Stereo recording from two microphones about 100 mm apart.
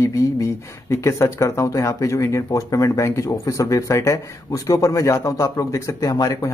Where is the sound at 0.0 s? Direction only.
30° left (ahead or behind).